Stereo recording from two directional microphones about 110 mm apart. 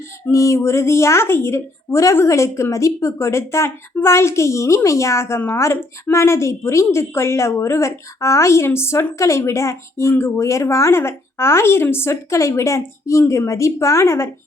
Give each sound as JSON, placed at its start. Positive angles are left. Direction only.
{"t": 0.3, "sound": "a woman's voice", "side_deg": 30}